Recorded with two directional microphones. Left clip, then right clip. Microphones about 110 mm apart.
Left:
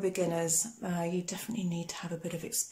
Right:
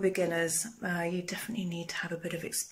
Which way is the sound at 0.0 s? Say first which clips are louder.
Right 2 dB; 20° left (ahead or behind).